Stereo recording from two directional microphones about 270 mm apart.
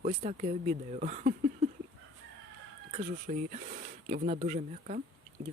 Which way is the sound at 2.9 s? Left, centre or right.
Right.